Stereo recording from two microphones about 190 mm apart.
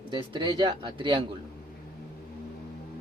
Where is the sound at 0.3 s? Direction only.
25° right (ahead or behind).